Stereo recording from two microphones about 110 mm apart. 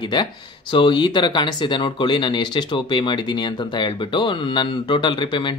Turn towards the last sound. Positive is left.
turn(degrees=45)  # may be behind; listen again after turning